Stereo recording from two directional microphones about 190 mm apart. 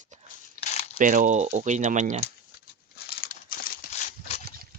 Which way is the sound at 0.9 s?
45° right (ahead or behind).